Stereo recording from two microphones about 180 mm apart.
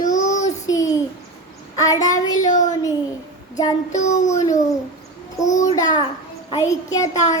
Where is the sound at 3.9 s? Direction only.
40° left (ahead or behind).